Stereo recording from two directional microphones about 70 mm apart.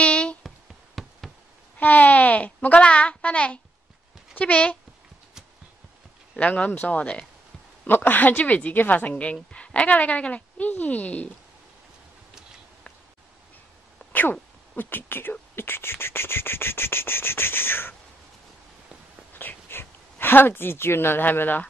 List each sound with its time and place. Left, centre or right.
0.0 s a sound: centre
1.0 s knock: centre
1.8 s a child's voice: left
6.3 s a woman's voice: centre
14.1 s speech: left
19.3 s a sound: left